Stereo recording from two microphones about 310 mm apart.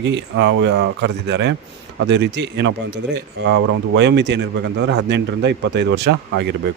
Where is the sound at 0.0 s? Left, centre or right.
Right.